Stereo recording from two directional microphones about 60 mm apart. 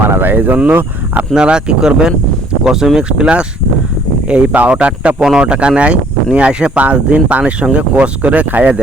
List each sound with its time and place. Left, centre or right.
0.0 s speech: right
1.3 s speech: centre